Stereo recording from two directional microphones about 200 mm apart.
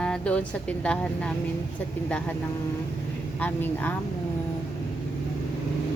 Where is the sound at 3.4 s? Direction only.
10° left (ahead or behind).